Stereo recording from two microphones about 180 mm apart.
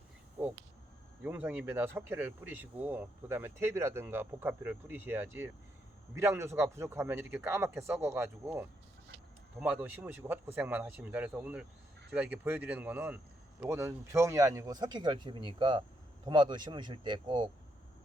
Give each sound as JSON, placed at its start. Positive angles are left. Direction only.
{"t": 1.2, "sound": "speech", "side_deg": -10}